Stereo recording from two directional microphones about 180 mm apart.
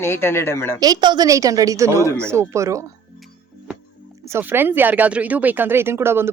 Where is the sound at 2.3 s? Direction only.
15° right (ahead or behind).